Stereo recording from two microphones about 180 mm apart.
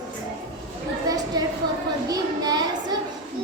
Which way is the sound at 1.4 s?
20° right (ahead or behind).